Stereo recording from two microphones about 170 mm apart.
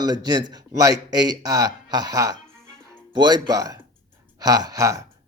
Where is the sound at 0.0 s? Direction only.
25° right (ahead or behind).